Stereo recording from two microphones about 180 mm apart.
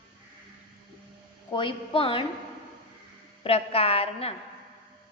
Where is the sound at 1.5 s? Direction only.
30° left (ahead or behind).